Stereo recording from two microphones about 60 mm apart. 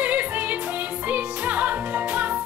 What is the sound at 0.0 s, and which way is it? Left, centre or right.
Music, right.